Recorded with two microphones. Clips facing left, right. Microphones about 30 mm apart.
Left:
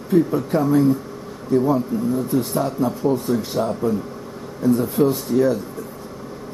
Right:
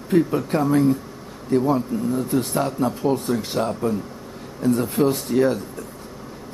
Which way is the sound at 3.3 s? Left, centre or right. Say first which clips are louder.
Left 2 dB; right.